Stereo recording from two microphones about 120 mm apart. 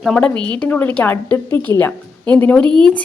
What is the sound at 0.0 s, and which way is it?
A woman's voice, 5° left (ahead or behind).